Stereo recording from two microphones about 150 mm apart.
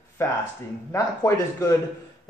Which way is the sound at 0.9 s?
20° left (ahead or behind).